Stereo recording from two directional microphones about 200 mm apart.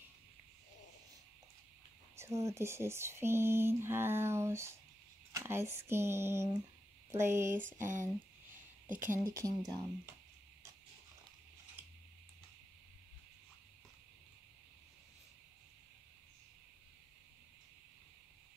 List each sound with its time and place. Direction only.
2.1 s speech: 15° right (ahead or behind)
7.6 s a sound: 40° right (ahead or behind)
8.8 s speech: 40° right (ahead or behind)
9.1 s speech: 15° right (ahead or behind)